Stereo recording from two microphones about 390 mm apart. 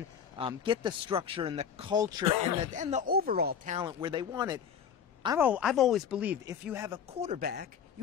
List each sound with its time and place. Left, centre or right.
0.4 s speech: centre